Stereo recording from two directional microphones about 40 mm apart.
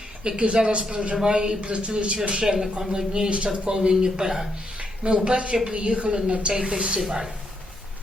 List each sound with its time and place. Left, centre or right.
0.3 s a man's voice: right
1.1 s a man's voice: centre
2.4 s speech: centre
3.1 s a man's voice: right
3.8 s a man's voice: centre